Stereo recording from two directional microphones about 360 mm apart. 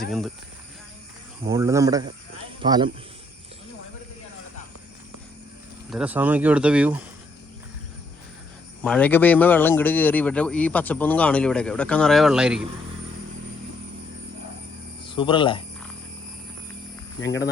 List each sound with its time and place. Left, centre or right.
1.5 s speech: centre
5.9 s speech: centre
8.8 s speech: centre
15.0 s speech: centre
17.2 s speech: left